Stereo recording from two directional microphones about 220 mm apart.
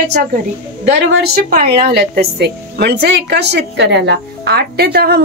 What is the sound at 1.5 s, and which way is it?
A woman's voice, 40° right (ahead or behind).